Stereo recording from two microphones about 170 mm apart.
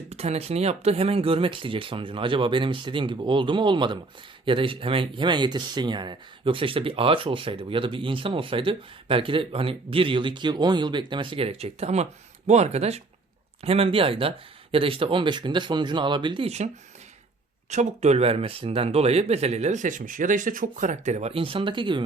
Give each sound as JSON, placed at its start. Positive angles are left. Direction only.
{"t": 0.1, "sound": "speech", "side_deg": -40}
{"t": 17.7, "sound": "speech", "side_deg": -40}